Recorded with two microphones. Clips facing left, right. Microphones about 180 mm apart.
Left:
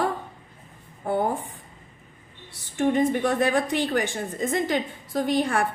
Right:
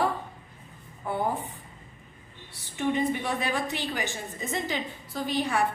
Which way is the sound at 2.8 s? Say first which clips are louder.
Left 5 dB; 50° left (ahead or behind).